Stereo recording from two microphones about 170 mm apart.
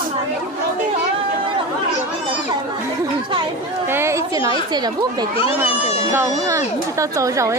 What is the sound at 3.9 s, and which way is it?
A woman's voice, 15° right (ahead or behind).